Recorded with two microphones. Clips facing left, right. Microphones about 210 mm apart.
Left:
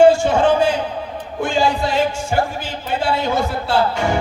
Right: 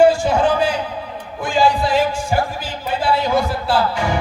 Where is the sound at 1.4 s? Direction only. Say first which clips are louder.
Right 1 dB; 25° left (ahead or behind).